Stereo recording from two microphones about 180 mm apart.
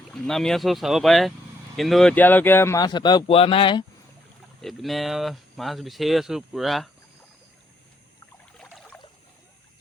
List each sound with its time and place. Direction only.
0.1 s speech: 5° left (ahead or behind); by 3.8 s 30° left (ahead or behind)
4.6 s speech: centre (ahead or behind)
8.5 s trickle: 5° left (ahead or behind)